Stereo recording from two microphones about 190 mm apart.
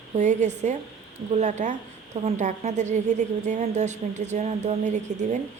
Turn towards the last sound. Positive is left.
turn(degrees=-40)  # may be behind; listen again after turning